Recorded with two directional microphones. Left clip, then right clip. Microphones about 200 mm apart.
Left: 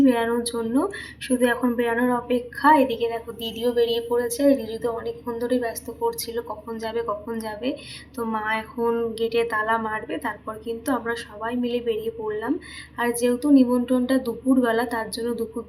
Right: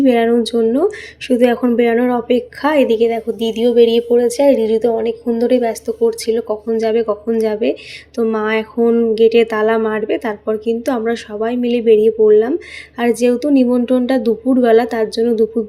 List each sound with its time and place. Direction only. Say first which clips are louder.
0.0 s a woman's voice: right 8 dB; 35° right (ahead or behind)